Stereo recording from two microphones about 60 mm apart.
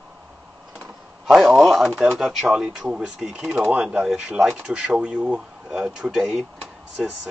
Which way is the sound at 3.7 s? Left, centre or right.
Centre.